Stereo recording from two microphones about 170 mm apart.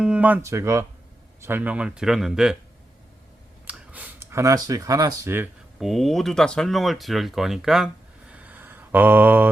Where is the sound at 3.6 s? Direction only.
10° right (ahead or behind).